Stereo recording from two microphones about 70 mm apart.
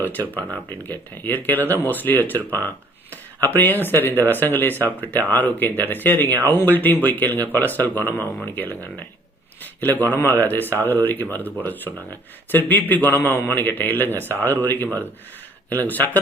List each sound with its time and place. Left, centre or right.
0.0 s speech: left